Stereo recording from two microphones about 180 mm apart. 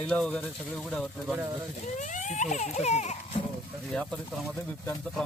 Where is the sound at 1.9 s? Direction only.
45° left (ahead or behind).